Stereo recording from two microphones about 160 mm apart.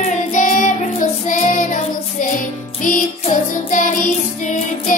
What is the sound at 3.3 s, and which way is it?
Music, 55° left (ahead or behind).